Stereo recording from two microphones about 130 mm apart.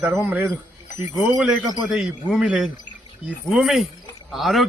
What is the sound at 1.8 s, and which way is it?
A man's voice, 5° right (ahead or behind).